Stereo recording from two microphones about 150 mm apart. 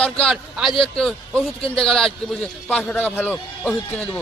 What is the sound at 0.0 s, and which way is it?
A man's voice, 5° left (ahead or behind).